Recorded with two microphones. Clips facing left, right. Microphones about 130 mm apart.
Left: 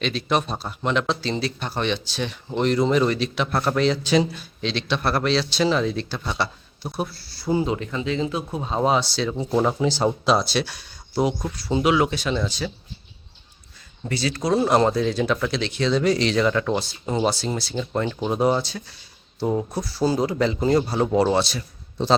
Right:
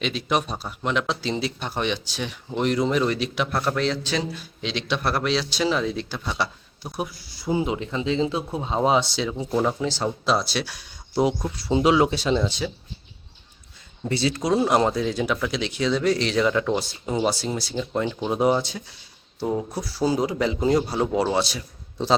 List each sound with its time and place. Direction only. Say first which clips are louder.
0.0 s a man's voice: left 1 dB; 15° right (ahead or behind)
3.6 s a man's voice: left 5 dB; 5° left (ahead or behind)
4.4 s speech: left 2 dB; 15° right (ahead or behind)
6.9 s speech: left 1 dB; 15° right (ahead or behind)
9.6 s speech: left 3 dB; 15° left (ahead or behind)
10.2 s a man's voice: left 3 dB; centre (ahead or behind)
11.1 s speech: right 1 dB; 20° right (ahead or behind)
14.1 s a man's voice: even; 25° right (ahead or behind)